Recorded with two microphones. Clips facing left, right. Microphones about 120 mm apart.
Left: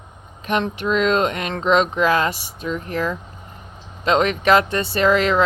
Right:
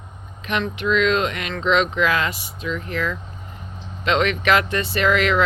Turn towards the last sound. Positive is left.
turn(degrees=30)  # may be behind; listen again after turning